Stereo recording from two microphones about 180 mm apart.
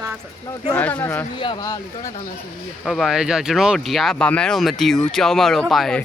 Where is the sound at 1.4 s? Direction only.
25° left (ahead or behind).